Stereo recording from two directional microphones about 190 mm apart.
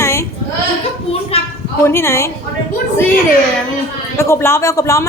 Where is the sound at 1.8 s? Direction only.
15° left (ahead or behind).